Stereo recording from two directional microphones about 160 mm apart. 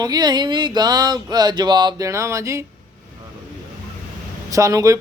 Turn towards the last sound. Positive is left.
turn(degrees=-20)  # may be behind; listen again after turning